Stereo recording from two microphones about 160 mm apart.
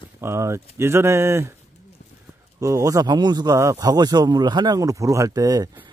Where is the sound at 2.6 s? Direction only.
20° right (ahead or behind).